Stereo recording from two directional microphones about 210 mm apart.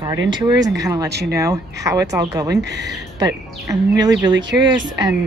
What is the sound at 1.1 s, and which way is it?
Speech, 50° right (ahead or behind).